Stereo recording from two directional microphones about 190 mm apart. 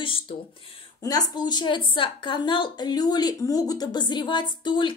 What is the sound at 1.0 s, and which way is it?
A woman's voice, 20° left (ahead or behind).